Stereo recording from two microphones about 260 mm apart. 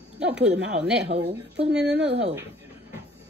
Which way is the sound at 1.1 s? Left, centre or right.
Right.